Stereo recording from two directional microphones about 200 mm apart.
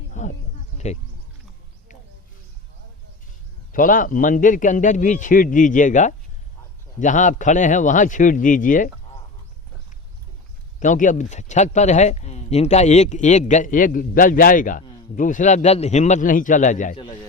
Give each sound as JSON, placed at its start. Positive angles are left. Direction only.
{"t": 0.1, "sound": "snake", "side_deg": 35}
{"t": 0.8, "sound": "speech", "side_deg": 35}
{"t": 3.7, "sound": "speech", "side_deg": 45}
{"t": 10.8, "sound": "speech", "side_deg": 40}